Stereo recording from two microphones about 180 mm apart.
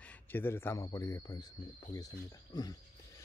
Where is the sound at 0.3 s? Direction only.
10° left (ahead or behind).